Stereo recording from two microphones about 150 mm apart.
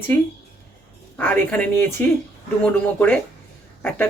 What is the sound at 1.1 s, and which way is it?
A woman's voice, 10° left (ahead or behind).